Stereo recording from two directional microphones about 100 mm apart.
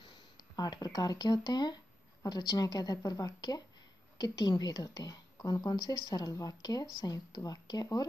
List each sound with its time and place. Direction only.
0.6 s a woman's voice: 45° left (ahead or behind)